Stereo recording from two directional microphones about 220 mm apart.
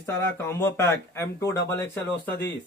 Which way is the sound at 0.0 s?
10° left (ahead or behind).